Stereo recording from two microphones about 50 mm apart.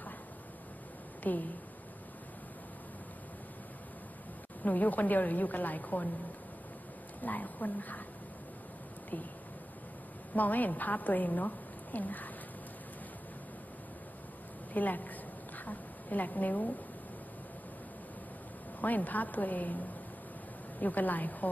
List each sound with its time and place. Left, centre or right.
1.2 s speech: left
4.6 s a woman's voice: left
7.2 s a woman's voice: left
10.3 s a woman's voice: left
14.7 s a woman's voice: left
15.5 s a sound: left
18.8 s a woman's voice: left